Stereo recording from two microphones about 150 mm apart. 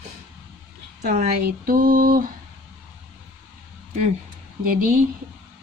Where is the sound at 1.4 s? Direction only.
70° right (ahead or behind).